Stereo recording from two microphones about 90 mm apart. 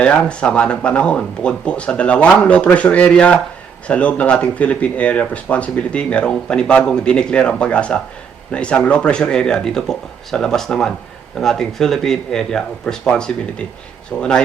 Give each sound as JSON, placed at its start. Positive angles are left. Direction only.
{"t": 0.0, "sound": "speech", "side_deg": 15}